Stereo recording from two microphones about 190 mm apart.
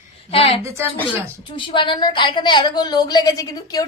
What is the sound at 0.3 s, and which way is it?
A woman's voice, 30° left (ahead or behind).